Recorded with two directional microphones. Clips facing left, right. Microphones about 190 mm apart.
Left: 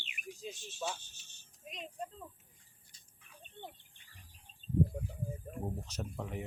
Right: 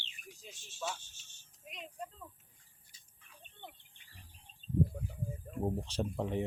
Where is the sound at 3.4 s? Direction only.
35° left (ahead or behind).